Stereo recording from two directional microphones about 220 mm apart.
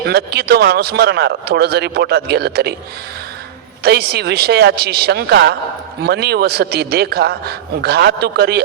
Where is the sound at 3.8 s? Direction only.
45° right (ahead or behind).